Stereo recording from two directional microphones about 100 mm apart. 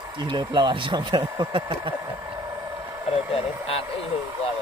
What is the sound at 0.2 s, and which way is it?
Speech, 50° right (ahead or behind).